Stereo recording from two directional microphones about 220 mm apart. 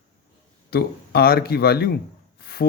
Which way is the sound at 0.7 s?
45° left (ahead or behind).